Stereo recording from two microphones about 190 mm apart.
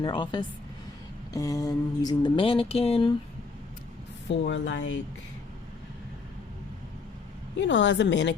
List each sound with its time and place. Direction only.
0.0 s mantra: 25° left (ahead or behind)
4.3 s a woman's voice: 70° left (ahead or behind)
7.5 s a woman's voice: 70° left (ahead or behind)